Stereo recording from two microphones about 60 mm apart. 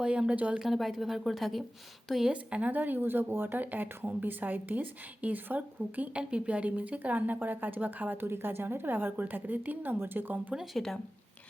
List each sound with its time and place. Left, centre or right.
0.0 s speech: centre
0.6 s a woman's voice: centre
2.3 s speech: right
10.8 s speech: centre